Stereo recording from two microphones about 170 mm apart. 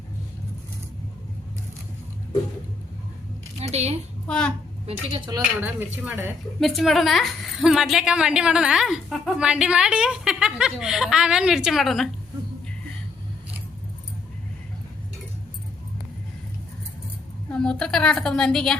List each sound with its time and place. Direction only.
3.6 s a sound: 40° right (ahead or behind)
4.3 s a woman's voice: 5° left (ahead or behind)
4.9 s a woman's voice: 30° right (ahead or behind)
5.5 s speech: 10° right (ahead or behind)
6.6 s a woman's voice: centre (ahead or behind)
17.5 s a woman's voice: 5° left (ahead or behind)